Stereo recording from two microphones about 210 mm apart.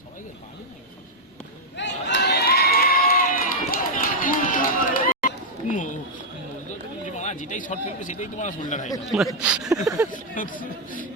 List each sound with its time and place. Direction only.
1.7 s crowd: 55° left (ahead or behind); by 5.9 s 35° left (ahead or behind)
7.2 s speech: 35° left (ahead or behind)
9.1 s speech: 5° right (ahead or behind)
10.1 s speech: 40° left (ahead or behind)